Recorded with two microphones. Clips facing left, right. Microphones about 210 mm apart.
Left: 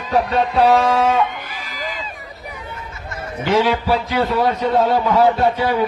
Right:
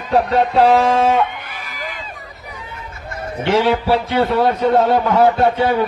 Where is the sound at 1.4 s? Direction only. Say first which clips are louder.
Left 1 dB; 60° right (ahead or behind).